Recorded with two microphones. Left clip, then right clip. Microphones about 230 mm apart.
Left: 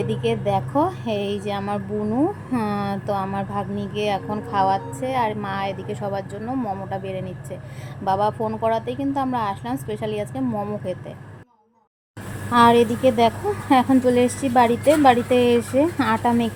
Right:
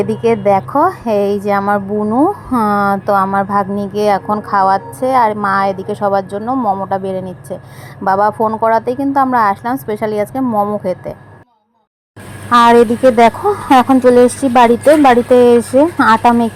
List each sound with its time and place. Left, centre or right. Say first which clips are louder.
0.0 s a woman's voice: right 10 dB; right
0.7 s speech: right 9 dB; right
1.0 s a woman's voice: right 12 dB; right
1.3 s speech: right 12 dB; right
12.5 s speech: right 8 dB; right